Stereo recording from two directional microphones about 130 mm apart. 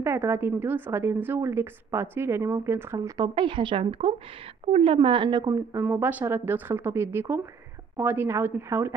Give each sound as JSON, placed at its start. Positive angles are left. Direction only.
{"t": 0.0, "sound": "a woman's voice", "side_deg": -20}
{"t": 3.2, "sound": "a woman's voice", "side_deg": -40}
{"t": 5.9, "sound": "speech", "side_deg": -10}